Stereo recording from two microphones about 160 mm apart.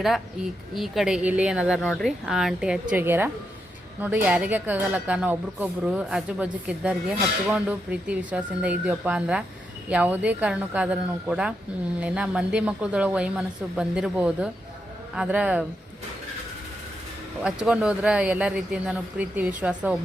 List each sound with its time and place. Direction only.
0.8 s a woman's voice: 5° right (ahead or behind)
1.8 s a woman's voice: 5° left (ahead or behind); by 15.6 s 10° right (ahead or behind)
17.4 s speech: 5° right (ahead or behind)